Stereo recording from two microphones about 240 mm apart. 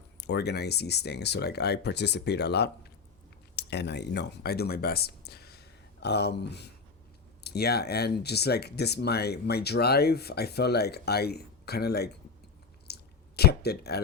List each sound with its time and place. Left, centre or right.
0.2 s speech: left
12.9 s squish: left